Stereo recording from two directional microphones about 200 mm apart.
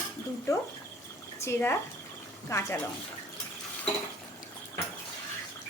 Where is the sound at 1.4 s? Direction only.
10° left (ahead or behind).